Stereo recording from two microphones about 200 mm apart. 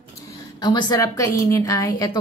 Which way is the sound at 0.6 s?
20° left (ahead or behind).